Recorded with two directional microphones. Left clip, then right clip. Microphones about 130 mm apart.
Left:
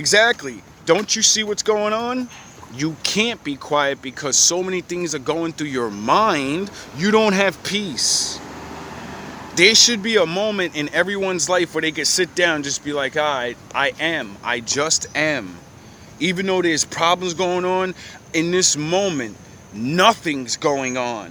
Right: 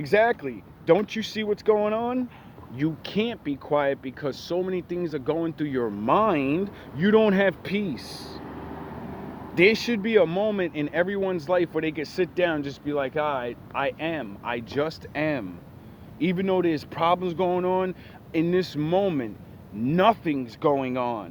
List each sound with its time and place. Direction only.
0.0 s speech: 15° left (ahead or behind)
7.6 s speech: 10° left (ahead or behind)
8.4 s speech: 20° left (ahead or behind)